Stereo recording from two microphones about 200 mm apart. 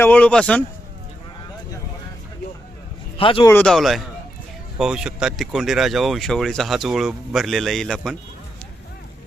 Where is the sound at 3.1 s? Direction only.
25° left (ahead or behind).